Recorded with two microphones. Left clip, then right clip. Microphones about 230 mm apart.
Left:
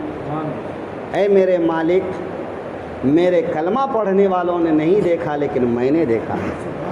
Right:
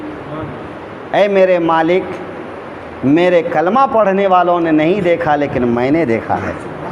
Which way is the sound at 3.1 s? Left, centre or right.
Right.